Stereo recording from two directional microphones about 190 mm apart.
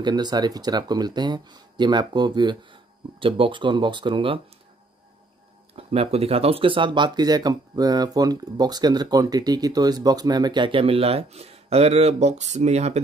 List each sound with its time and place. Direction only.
0.0 s speech: 20° right (ahead or behind)
5.8 s speech: 30° right (ahead or behind)